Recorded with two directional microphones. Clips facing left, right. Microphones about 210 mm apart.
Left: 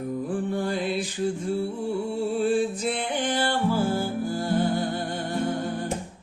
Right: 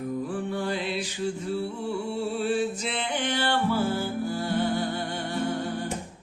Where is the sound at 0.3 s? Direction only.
50° left (ahead or behind).